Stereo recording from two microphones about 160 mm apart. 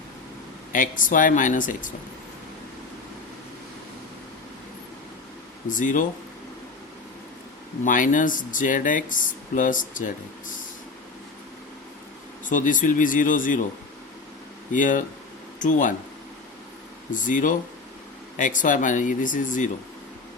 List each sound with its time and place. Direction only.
0.7 s speech: 55° left (ahead or behind)
5.6 s speech: 55° left (ahead or behind)
7.9 s speech: 55° left (ahead or behind)
12.5 s speech: 55° left (ahead or behind)
14.7 s speech: 55° left (ahead or behind)
17.1 s speech: 55° left (ahead or behind)